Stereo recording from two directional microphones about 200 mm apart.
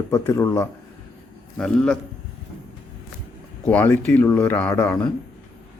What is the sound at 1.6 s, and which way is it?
Speech, 5° left (ahead or behind).